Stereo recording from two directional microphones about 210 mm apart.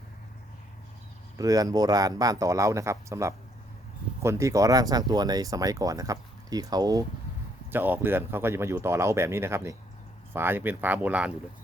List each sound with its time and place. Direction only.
1.4 s speech: 15° right (ahead or behind)